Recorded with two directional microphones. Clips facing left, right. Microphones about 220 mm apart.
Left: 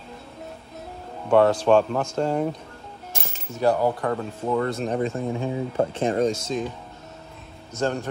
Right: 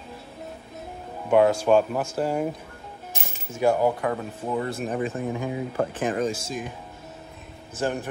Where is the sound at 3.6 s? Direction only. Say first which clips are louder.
Even; 15° right (ahead or behind).